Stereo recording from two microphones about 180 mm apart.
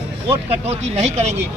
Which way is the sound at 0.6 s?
35° right (ahead or behind).